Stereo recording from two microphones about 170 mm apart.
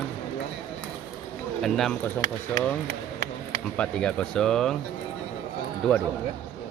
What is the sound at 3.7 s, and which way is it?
Speech, 5° left (ahead or behind).